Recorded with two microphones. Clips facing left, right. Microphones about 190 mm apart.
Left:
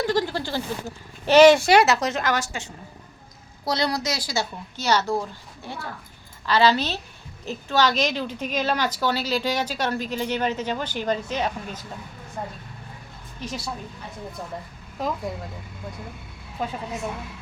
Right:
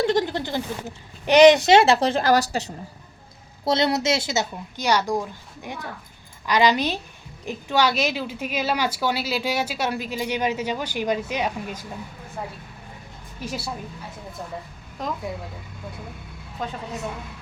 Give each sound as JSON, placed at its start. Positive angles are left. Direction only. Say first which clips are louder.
{"t": 0.0, "sound": "a child's voice", "louder": "right 2 dB", "side_deg": -20}
{"t": 3.6, "sound": "a woman's voice", "louder": "right 4 dB", "side_deg": -25}
{"t": 15.0, "sound": "speech", "louder": "left 2 dB", "side_deg": 5}
{"t": 16.6, "sound": "a woman's voice", "louder": "left 2 dB", "side_deg": 10}